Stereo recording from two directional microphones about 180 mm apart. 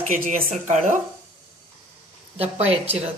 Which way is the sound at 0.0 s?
45° right (ahead or behind).